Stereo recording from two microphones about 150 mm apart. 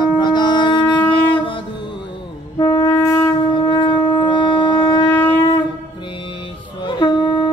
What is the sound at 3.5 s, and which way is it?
Shofar, 30° left (ahead or behind).